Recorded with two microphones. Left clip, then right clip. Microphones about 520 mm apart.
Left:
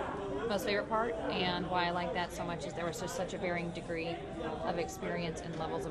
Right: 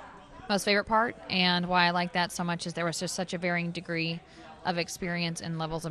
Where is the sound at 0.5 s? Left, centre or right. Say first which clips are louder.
Right 8 dB; right.